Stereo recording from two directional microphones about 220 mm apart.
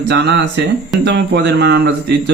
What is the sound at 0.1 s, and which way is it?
Speech, 50° right (ahead or behind).